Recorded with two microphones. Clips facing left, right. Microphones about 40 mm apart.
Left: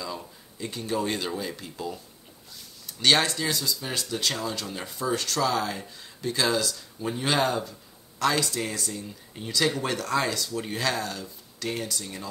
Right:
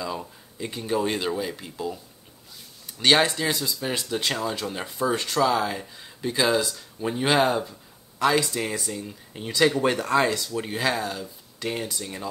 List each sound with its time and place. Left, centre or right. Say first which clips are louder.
0.0 s speech: right 4 dB; centre